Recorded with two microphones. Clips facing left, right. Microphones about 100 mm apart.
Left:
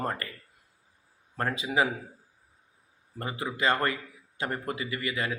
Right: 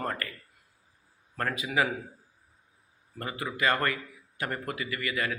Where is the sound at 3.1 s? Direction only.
25° left (ahead or behind).